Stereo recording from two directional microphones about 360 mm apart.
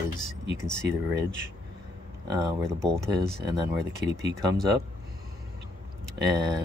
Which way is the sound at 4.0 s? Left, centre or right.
Right.